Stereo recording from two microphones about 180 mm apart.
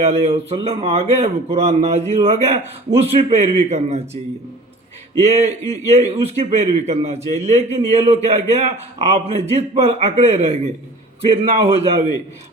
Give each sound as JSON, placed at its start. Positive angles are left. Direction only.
{"t": 0.0, "sound": "speech", "side_deg": -35}
{"t": 5.2, "sound": "speech", "side_deg": -35}